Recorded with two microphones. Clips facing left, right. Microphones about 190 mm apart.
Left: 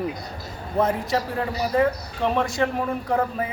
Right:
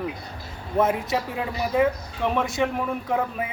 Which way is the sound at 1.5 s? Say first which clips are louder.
Left 2 dB; 40° left (ahead or behind).